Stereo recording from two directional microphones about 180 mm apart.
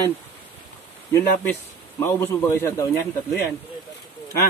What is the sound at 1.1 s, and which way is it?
A man's voice, 15° left (ahead or behind).